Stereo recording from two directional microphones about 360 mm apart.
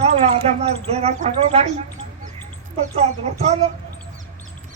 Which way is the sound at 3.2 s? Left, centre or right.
Centre.